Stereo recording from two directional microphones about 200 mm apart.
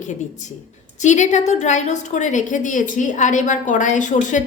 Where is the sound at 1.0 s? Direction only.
35° left (ahead or behind).